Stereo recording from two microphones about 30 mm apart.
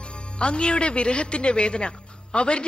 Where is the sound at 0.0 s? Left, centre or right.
Left.